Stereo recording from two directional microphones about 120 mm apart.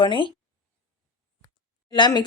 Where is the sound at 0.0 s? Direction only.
45° left (ahead or behind).